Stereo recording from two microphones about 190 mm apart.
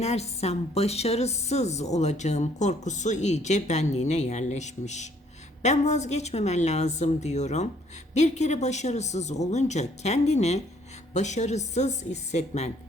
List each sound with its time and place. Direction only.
0.0 s a woman's voice: 35° left (ahead or behind)